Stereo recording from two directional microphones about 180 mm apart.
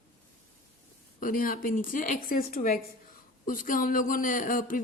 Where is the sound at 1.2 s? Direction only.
50° left (ahead or behind).